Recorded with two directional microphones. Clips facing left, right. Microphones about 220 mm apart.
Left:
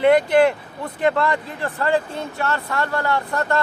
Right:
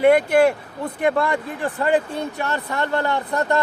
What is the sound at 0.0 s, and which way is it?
Speech, 10° right (ahead or behind).